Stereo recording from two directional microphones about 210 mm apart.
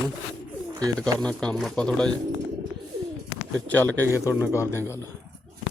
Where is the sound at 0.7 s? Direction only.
20° right (ahead or behind).